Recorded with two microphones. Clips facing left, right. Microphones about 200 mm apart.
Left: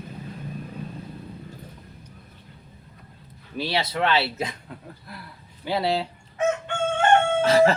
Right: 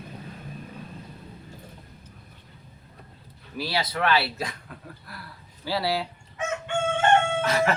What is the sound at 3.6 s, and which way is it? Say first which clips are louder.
Speech: left 2 dB; 25° left (ahead or behind).